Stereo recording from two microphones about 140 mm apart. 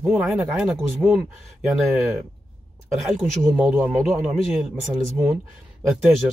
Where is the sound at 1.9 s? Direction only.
Centre (ahead or behind).